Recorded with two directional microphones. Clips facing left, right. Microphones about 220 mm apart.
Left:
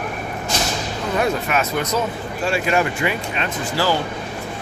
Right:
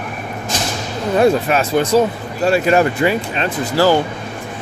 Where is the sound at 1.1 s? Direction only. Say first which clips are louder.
Right 7 dB; 30° right (ahead or behind).